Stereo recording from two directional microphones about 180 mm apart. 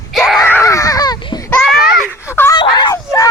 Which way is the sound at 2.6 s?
25° left (ahead or behind).